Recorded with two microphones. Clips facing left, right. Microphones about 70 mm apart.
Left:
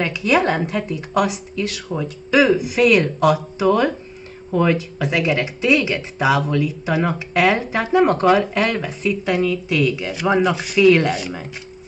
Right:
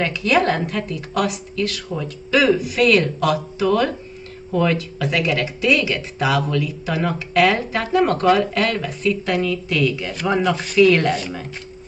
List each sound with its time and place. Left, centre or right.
0.0 s speech: centre